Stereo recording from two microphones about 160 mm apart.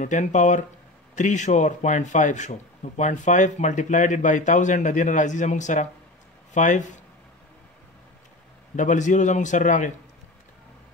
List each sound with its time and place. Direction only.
0.0 s speech: 50° left (ahead or behind)
8.7 s speech: 50° left (ahead or behind)